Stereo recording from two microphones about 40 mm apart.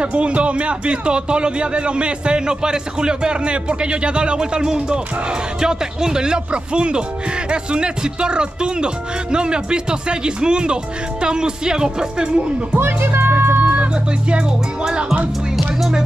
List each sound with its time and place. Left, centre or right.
0.0 s speech: right
12.7 s music: right
13.6 s vehicle: right